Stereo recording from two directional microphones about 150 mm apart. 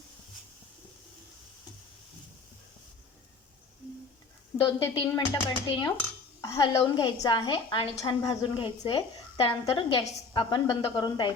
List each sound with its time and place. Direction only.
4.5 s a woman's voice: 35° left (ahead or behind)